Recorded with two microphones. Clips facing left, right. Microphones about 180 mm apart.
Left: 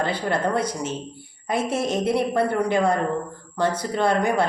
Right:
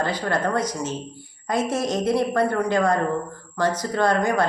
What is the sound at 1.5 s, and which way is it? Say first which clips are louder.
Speech: right 1 dB; 30° left (ahead or behind).